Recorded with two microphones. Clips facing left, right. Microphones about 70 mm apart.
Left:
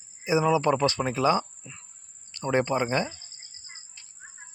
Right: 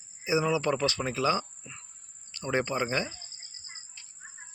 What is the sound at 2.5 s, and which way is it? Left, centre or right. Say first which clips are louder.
Speech: left 4 dB; left.